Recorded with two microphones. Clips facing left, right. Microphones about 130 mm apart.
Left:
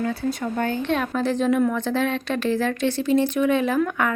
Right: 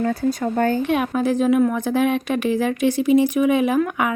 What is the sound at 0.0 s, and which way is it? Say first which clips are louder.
Speech: right 4 dB; 40° right (ahead or behind).